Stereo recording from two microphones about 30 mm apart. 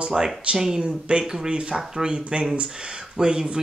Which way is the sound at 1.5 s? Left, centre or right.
Right.